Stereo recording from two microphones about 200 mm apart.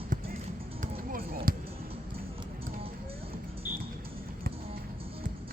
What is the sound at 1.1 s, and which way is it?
Basketball bounce, 45° right (ahead or behind).